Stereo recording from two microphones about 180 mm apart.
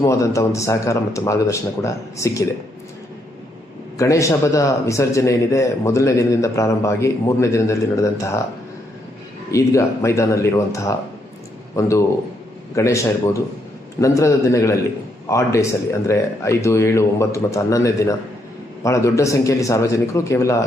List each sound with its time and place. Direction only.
0.0 s speech: 15° left (ahead or behind)
3.9 s speech: 15° left (ahead or behind)
9.5 s speech: 15° left (ahead or behind)